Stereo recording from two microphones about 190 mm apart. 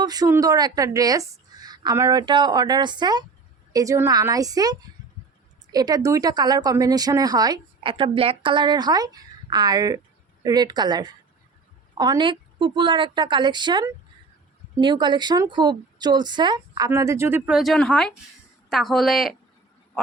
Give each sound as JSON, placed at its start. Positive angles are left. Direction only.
{"t": 0.0, "sound": "a woman's voice", "side_deg": -20}